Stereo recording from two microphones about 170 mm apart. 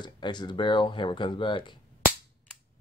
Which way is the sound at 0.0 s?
25° left (ahead or behind).